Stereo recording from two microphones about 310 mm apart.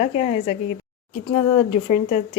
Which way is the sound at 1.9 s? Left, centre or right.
Left.